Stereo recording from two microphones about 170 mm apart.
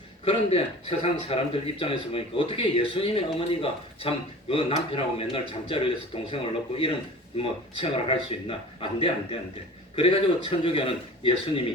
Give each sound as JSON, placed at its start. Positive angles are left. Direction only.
{"t": 0.3, "sound": "a man's voice", "side_deg": 35}